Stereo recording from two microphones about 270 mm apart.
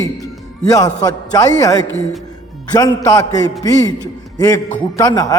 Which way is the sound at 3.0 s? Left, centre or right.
Centre.